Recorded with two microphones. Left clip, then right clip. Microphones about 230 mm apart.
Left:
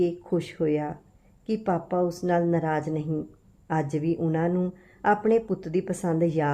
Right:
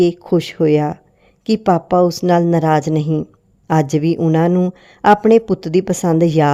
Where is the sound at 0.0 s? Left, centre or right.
Right.